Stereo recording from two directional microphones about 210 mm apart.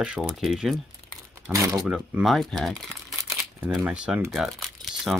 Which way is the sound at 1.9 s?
Centre (ahead or behind).